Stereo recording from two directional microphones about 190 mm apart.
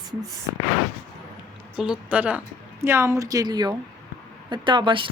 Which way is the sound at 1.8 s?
5° right (ahead or behind).